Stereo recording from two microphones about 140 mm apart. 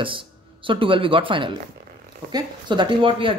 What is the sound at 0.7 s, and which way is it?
Speech, 40° right (ahead or behind).